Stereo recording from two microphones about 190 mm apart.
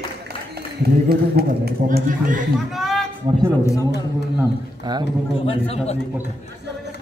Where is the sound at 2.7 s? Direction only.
Centre (ahead or behind).